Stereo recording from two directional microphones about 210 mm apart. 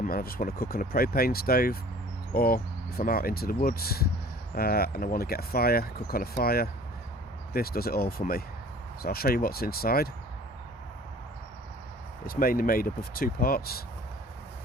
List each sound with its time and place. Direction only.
0.1 s speech: 45° left (ahead or behind)
12.2 s speech: 45° left (ahead or behind)